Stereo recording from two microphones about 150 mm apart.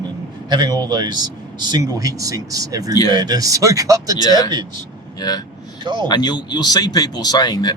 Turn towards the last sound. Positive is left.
turn(degrees=25)  # may be behind; listen again after turning